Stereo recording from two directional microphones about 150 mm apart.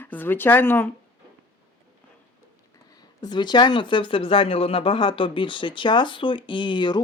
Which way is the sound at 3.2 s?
30° left (ahead or behind).